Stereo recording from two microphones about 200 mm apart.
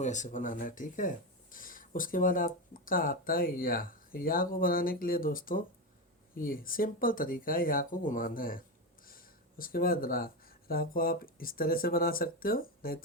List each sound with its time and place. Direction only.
0.0 s speech: 35° left (ahead or behind)